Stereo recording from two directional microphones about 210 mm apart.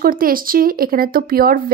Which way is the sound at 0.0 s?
45° right (ahead or behind).